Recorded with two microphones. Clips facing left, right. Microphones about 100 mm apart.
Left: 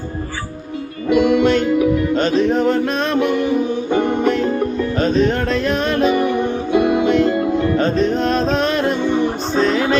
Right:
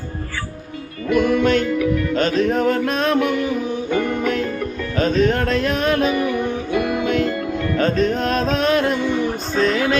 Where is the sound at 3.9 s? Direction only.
25° left (ahead or behind).